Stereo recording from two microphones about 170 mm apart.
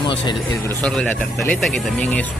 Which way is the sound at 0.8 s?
5° left (ahead or behind).